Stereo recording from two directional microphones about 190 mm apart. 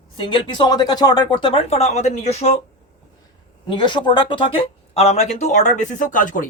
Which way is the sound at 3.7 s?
25° left (ahead or behind).